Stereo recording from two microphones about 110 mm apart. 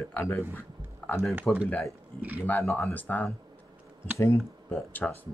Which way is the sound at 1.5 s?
15° left (ahead or behind).